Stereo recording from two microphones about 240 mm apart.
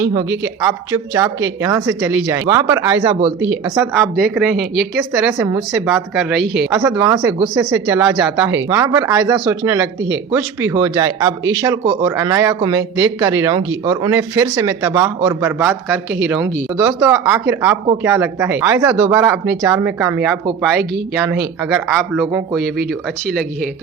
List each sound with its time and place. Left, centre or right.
0.0 s speech: centre
3.9 s a woman's voice: centre
6.7 s a woman's voice: centre
8.7 s a man's voice: centre
22.3 s speech: centre